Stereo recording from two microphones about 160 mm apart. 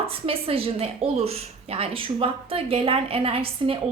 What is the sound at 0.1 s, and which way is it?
A woman's voice, 35° right (ahead or behind).